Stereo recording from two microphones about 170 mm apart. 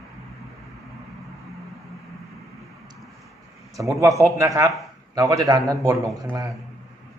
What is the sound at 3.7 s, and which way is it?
Speech, 20° right (ahead or behind).